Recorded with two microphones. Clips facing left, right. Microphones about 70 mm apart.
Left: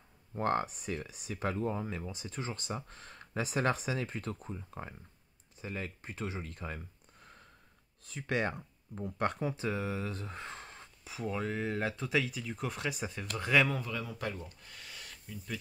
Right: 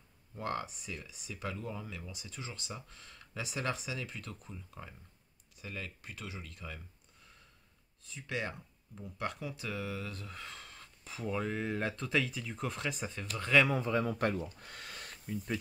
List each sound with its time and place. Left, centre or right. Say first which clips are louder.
0.3 s speech: left 6 dB; left
8.0 s speech: left 5 dB; left
11.1 s speech: even; centre
13.7 s a man's voice: right 6 dB; right
14.0 s speech: right 6 dB; right
14.6 s a sound: right 3 dB; right